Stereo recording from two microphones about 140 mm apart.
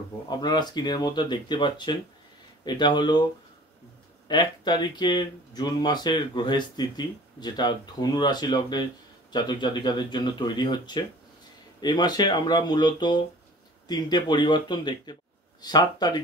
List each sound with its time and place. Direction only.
0.3 s speech: 30° left (ahead or behind)
4.3 s speech: 30° left (ahead or behind)